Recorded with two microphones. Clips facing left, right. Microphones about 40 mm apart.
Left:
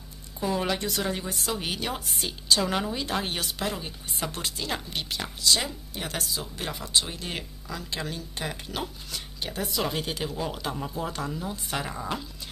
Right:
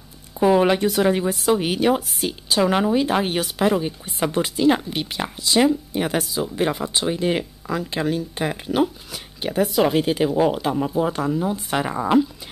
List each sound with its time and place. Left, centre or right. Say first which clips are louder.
0.4 s speech: right 11 dB; right
0.7 s a woman's voice: right 11 dB; centre
2.0 s a woman's voice: right 7 dB; centre
2.4 s speech: right 7 dB; centre